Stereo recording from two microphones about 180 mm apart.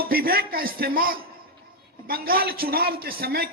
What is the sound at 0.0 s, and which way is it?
A man's voice, 55° right (ahead or behind).